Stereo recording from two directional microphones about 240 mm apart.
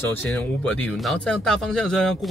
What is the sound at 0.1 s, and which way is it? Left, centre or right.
Speech, centre.